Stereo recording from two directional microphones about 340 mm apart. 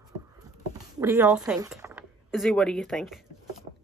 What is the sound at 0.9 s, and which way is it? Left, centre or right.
Speech, centre.